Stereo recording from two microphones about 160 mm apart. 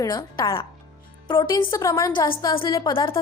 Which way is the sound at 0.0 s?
25° left (ahead or behind).